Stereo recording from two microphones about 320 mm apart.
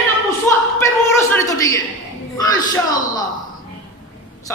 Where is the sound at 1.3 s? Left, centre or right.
Centre.